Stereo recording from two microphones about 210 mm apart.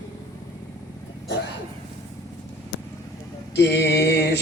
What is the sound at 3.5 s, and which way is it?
Mantra, 55° left (ahead or behind).